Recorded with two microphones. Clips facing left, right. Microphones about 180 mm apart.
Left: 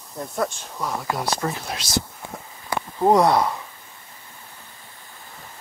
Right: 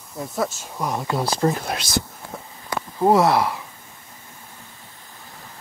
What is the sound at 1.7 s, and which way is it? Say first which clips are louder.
Speech: right 4 dB; 55° right (ahead or behind).